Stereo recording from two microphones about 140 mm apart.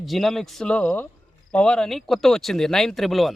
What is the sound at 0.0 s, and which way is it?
Speech, centre (ahead or behind).